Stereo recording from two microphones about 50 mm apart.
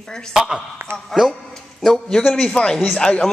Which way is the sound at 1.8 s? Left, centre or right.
Centre.